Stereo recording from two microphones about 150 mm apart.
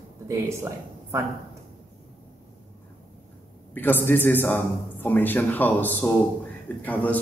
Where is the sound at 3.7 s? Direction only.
15° left (ahead or behind).